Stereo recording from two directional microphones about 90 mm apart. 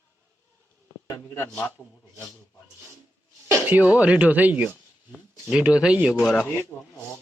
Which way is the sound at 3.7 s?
15° right (ahead or behind).